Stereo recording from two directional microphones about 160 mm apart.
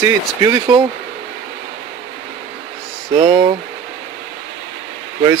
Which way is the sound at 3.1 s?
35° right (ahead or behind).